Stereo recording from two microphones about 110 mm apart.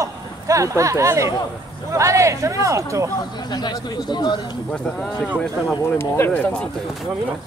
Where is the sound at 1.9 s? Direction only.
30° right (ahead or behind).